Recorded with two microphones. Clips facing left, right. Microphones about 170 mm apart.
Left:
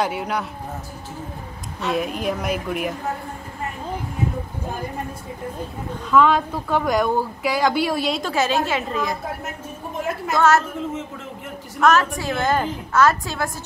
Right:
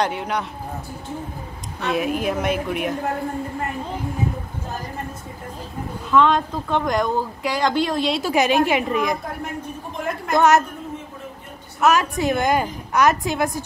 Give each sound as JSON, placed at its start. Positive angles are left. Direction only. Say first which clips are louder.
{"t": 0.0, "sound": "speech", "louder": "even", "side_deg": 5}
{"t": 1.9, "sound": "speech", "louder": "right 1 dB", "side_deg": -5}
{"t": 6.0, "sound": "speech", "louder": "even", "side_deg": 5}
{"t": 8.2, "sound": "a woman's voice", "louder": "right 3 dB", "side_deg": -15}
{"t": 10.3, "sound": "a woman's voice", "louder": "right 2 dB", "side_deg": -20}
{"t": 11.8, "sound": "a woman's voice", "louder": "even", "side_deg": -15}